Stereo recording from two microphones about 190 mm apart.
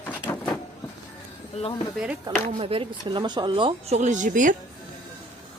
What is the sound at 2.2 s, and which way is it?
Speech, 30° right (ahead or behind).